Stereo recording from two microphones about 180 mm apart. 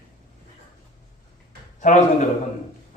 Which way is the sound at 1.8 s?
40° left (ahead or behind).